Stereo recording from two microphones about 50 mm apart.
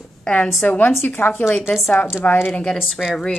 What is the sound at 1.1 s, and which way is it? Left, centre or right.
Speech, left.